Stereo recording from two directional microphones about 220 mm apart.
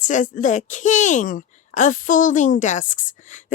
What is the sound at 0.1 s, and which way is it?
A woman's voice, 35° left (ahead or behind).